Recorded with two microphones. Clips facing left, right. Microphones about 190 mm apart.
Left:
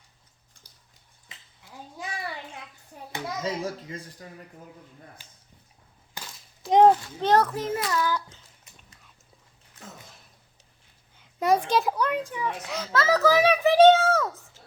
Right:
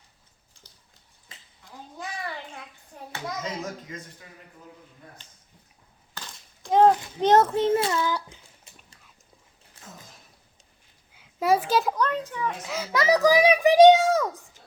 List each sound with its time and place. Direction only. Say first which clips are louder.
0.7 s a sound: right 3 dB; 10° left (ahead or behind)
3.4 s speech: left 3 dB; 30° left (ahead or behind)
5.2 s speech: left 1 dB; 10° left (ahead or behind)
6.1 s breaking: even; 5° left (ahead or behind)
6.7 s a child's voice: left 1 dB; 15° left (ahead or behind)
7.2 s a child's voice: right 3 dB; 20° right (ahead or behind)
11.1 s a child's voice: even; 5° right (ahead or behind); by 12.5 s 10° left (ahead or behind)
12.6 s a child's voice: right 1 dB; 5° right (ahead or behind)
12.9 s a child's voice: right 1 dB; 15° right (ahead or behind)